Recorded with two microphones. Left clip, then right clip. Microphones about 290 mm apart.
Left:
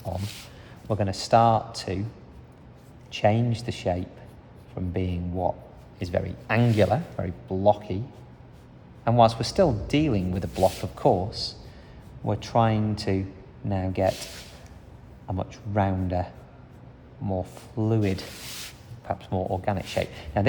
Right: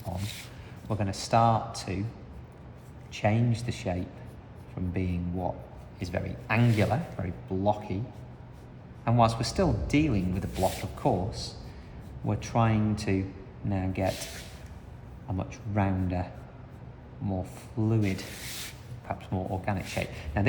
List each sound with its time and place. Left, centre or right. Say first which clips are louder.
0.9 s speech: left 6 dB; left
3.1 s speech: left 6 dB; left
9.0 s speech: left 5 dB; left
12.2 s speech: left 5 dB; left
15.3 s speech: left 4 dB; left